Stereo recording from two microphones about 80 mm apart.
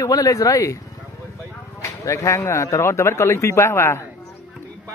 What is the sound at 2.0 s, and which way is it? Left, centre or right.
Speech, left.